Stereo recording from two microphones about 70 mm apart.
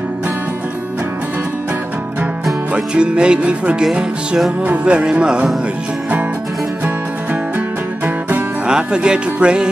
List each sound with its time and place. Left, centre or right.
2.7 s speech: centre
7.5 s music: right
8.6 s speech: centre